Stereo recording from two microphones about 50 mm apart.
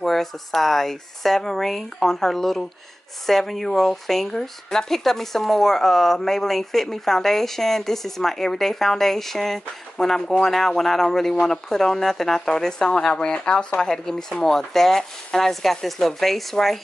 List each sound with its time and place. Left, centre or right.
0.0 s speech: centre